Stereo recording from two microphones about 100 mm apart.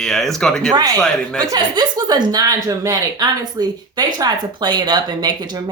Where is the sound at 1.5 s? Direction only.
40° right (ahead or behind).